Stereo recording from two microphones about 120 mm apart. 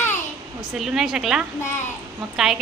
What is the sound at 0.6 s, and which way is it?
A woman's voice, 5° right (ahead or behind).